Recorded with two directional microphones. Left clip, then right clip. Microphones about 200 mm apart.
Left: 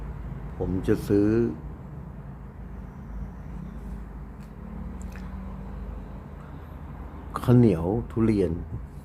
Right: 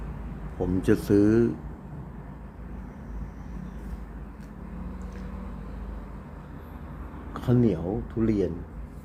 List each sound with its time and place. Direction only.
0.6 s speech: 5° right (ahead or behind)
7.3 s speech: 15° left (ahead or behind)